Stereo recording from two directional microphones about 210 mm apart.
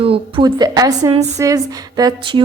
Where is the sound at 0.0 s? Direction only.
25° right (ahead or behind).